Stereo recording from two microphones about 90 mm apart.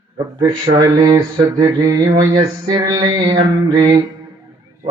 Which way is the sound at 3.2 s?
75° right (ahead or behind).